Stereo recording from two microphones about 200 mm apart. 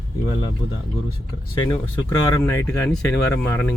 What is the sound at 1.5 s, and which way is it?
Speech, 20° left (ahead or behind).